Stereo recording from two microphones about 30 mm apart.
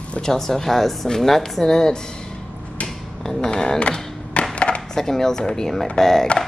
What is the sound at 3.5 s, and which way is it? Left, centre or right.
Speech, left.